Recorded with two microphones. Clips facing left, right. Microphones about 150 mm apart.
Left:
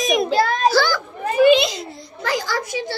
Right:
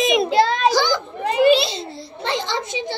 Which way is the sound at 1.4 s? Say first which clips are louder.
Left 2 dB; 30° right (ahead or behind).